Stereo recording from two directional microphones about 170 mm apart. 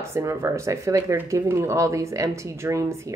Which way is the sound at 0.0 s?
15° right (ahead or behind).